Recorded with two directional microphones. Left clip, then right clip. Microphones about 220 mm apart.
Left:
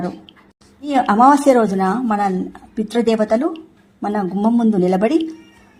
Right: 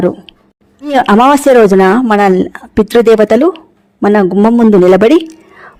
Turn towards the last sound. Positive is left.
turn(degrees=-50)  # may be behind; listen again after turning